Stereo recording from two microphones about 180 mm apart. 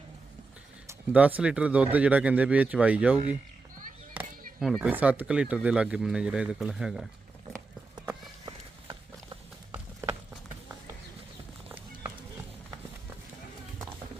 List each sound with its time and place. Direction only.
0.9 s speech: 10° right (ahead or behind)
4.1 s a sound: 10° right (ahead or behind)
4.8 s speech: 10° right (ahead or behind)
8.4 s clip-clop: 25° right (ahead or behind)
9.7 s clip-clop: 15° right (ahead or behind)